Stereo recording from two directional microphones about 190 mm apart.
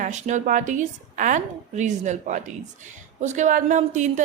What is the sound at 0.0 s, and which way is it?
A woman's voice, 40° right (ahead or behind).